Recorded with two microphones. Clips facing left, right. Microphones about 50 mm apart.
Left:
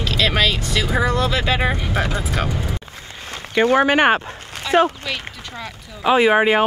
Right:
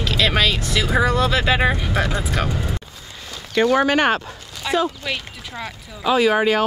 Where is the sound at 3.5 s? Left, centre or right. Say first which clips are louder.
Left 1 dB; left.